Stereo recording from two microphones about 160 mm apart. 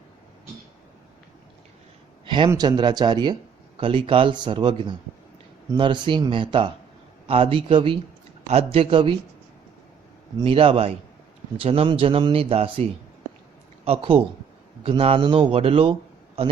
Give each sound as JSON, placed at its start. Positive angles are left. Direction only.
{"t": 2.2, "sound": "a sound", "side_deg": -30}
{"t": 2.5, "sound": "speech", "side_deg": -25}
{"t": 10.3, "sound": "a man's voice", "side_deg": -35}